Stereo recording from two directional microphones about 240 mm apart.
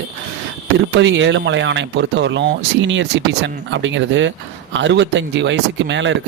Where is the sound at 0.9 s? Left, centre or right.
Right.